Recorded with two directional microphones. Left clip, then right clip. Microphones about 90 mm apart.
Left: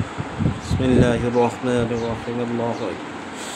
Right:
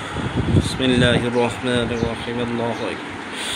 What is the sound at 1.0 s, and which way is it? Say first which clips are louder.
Speech: even; 15° left (ahead or behind).